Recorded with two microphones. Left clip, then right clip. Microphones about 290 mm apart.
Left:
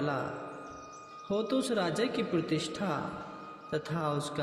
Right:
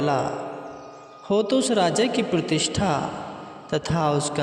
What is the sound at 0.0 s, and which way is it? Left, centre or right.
Speech, right.